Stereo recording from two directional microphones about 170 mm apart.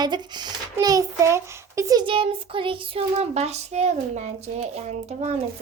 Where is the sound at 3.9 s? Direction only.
45° right (ahead or behind).